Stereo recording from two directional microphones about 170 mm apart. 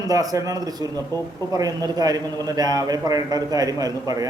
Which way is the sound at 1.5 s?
20° right (ahead or behind).